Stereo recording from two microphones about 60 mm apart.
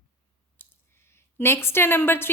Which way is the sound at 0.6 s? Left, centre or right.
Left.